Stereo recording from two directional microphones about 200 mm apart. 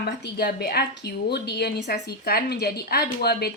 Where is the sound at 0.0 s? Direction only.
55° left (ahead or behind).